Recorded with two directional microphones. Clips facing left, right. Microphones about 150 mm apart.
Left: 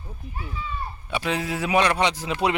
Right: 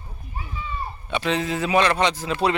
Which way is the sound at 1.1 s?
10° left (ahead or behind).